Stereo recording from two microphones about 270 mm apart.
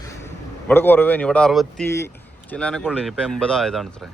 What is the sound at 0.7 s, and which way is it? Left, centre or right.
Speech, centre.